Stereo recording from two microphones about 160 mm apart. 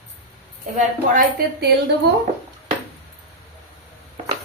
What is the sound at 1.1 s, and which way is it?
Speech, 85° right.